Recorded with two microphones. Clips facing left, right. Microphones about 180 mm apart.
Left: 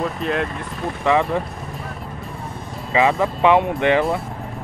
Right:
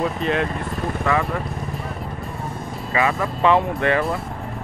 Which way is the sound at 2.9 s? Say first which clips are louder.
Left 4 dB; 20° left (ahead or behind).